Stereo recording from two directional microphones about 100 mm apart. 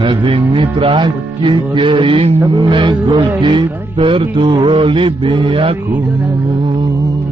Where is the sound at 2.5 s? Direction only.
55° right (ahead or behind).